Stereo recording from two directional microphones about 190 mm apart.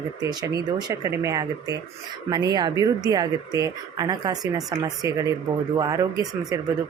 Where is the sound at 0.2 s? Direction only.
20° right (ahead or behind).